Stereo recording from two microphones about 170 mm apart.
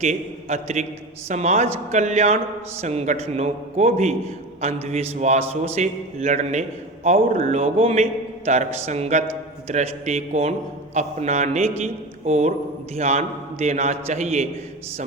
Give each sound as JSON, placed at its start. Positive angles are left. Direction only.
{"t": 0.0, "sound": "a man's voice", "side_deg": -40}
{"t": 7.2, "sound": "speech", "side_deg": -55}
{"t": 7.5, "sound": "a man's voice", "side_deg": -35}